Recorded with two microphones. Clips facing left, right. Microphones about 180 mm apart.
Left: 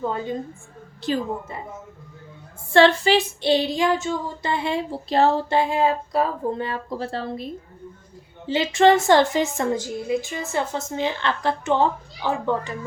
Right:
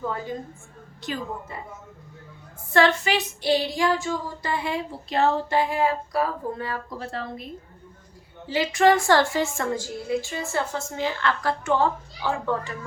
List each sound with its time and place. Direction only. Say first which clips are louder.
0.0 s a woman's voice: left 4 dB; 25° left (ahead or behind)
2.7 s child singing: left 5 dB; 30° left (ahead or behind)
8.4 s child singing: left 3 dB; 25° left (ahead or behind)